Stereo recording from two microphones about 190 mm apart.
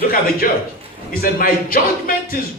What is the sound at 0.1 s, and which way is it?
Speech, 50° left (ahead or behind).